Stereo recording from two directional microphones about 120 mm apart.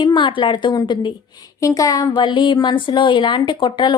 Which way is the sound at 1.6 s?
30° left (ahead or behind).